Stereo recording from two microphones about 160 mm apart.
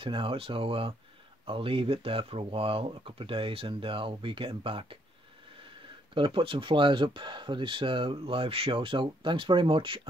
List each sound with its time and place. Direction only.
0.0 s speech: 30° right (ahead or behind)